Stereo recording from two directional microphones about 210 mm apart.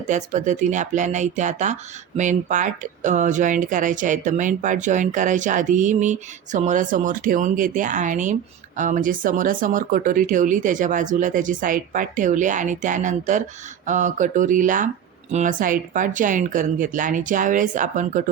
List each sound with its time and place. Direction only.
0.1 s speech: 35° right (ahead or behind)